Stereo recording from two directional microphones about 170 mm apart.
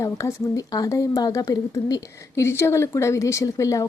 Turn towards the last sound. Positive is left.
turn(degrees=20)  # may be behind; listen again after turning